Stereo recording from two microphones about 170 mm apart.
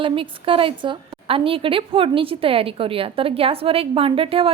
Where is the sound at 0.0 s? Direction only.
30° right (ahead or behind).